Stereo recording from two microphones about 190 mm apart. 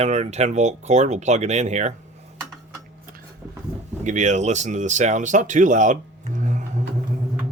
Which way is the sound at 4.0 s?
40° right (ahead or behind).